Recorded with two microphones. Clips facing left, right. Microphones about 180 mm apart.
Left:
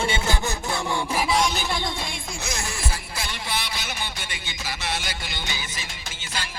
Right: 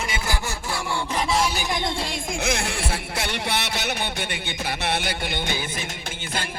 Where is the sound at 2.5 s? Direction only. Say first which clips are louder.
Right 6 dB; 60° right (ahead or behind).